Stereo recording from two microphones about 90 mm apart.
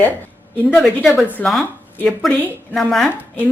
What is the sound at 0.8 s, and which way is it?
Speech, centre (ahead or behind).